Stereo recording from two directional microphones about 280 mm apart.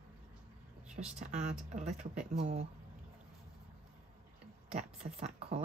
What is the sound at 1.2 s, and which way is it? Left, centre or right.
Speech, right.